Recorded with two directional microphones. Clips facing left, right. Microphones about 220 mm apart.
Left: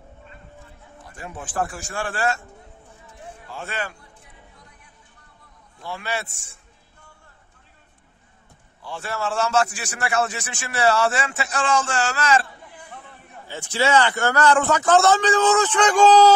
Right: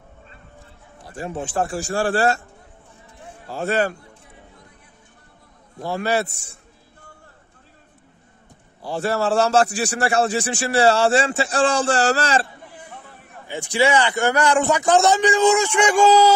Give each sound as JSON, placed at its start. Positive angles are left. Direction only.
{"t": 1.0, "sound": "a man's voice", "side_deg": -30}
{"t": 3.4, "sound": "a man's voice", "side_deg": -40}
{"t": 5.8, "sound": "a man's voice", "side_deg": -40}
{"t": 8.8, "sound": "a man's voice", "side_deg": -35}
{"t": 13.5, "sound": "a man's voice", "side_deg": -15}